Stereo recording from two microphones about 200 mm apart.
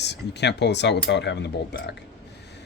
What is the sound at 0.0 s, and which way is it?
Speech, 60° left (ahead or behind).